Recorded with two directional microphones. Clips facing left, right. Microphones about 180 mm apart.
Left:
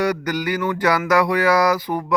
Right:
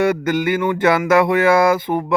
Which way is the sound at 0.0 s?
25° right (ahead or behind).